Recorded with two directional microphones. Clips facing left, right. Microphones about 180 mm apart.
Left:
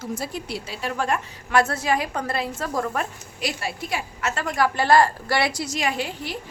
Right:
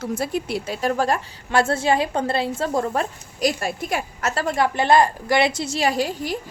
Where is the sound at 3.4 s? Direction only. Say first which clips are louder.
Right 6 dB; 45° right (ahead or behind).